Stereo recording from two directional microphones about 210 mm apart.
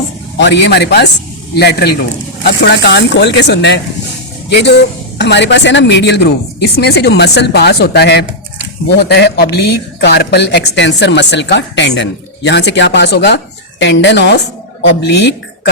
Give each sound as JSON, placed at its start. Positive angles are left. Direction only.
{"t": 0.3, "sound": "speech", "side_deg": 55}